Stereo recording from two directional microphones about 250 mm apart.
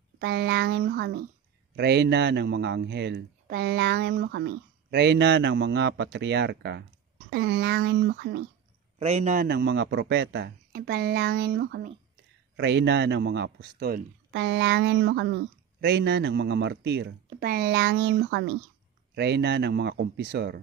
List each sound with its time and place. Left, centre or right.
0.2 s a man's voice: right
9.0 s a man's voice: right